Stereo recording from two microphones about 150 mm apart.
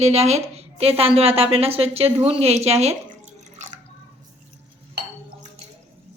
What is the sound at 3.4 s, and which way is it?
Water, 50° right (ahead or behind).